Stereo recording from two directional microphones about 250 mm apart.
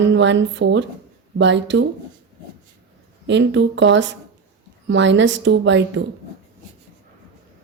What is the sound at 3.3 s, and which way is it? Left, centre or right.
Speech, right.